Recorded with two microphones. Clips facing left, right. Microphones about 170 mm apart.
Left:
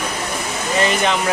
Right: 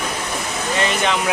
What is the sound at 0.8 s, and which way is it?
Speech, centre (ahead or behind).